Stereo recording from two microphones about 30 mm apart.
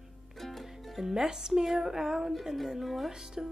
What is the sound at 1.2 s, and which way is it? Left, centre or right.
A woman's voice, centre.